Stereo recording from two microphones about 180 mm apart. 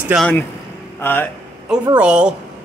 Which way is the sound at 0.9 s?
10° left (ahead or behind).